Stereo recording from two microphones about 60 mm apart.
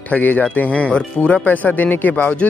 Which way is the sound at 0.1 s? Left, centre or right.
Left.